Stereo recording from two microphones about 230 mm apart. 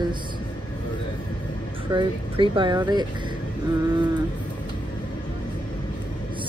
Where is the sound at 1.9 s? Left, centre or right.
Right.